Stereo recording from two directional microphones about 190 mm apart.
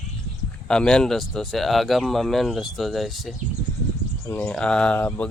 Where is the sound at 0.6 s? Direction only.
5° left (ahead or behind).